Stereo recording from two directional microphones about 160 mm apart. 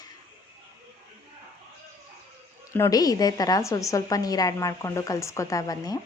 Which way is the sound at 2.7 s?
20° left (ahead or behind).